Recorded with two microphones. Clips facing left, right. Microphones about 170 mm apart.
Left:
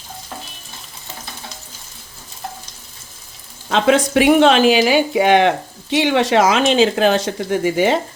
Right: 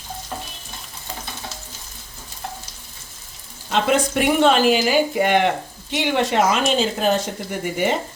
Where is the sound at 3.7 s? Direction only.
90° left.